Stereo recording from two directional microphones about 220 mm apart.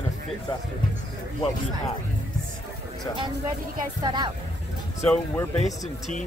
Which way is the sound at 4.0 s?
20° right (ahead or behind).